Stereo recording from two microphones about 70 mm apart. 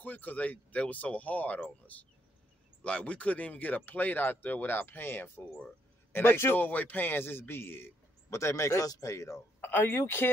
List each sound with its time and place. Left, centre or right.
0.0 s a man's voice: left
9.6 s a man's voice: left